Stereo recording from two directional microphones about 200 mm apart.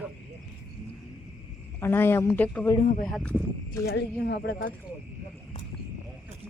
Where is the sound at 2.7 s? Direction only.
40° left (ahead or behind).